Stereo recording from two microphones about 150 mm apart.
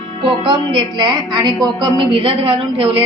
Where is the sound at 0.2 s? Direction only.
35° right (ahead or behind).